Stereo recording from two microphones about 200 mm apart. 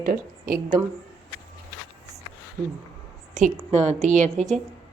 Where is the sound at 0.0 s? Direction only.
45° right (ahead or behind).